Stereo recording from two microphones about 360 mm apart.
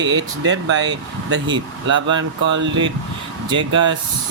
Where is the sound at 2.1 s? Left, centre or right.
Right.